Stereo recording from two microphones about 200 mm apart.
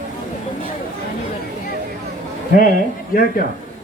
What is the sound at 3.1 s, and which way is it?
Speech, 45° left (ahead or behind).